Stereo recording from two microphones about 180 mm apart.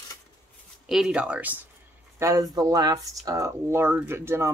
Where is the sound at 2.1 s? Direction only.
20° right (ahead or behind).